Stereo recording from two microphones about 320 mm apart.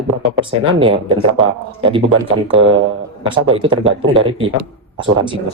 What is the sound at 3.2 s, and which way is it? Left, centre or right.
Speech, centre.